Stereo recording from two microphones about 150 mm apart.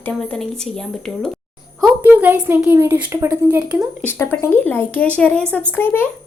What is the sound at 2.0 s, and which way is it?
A woman's voice, 10° right (ahead or behind).